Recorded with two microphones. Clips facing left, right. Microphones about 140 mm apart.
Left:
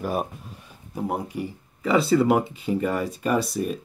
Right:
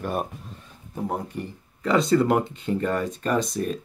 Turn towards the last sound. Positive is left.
turn(degrees=5)  # may be behind; listen again after turning